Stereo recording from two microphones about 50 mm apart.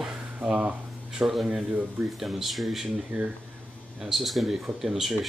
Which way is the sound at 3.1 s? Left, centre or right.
Right.